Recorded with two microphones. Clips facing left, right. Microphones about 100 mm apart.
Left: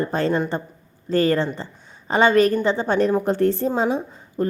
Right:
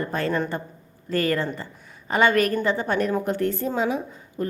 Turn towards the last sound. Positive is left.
turn(degrees=30)  # may be behind; listen again after turning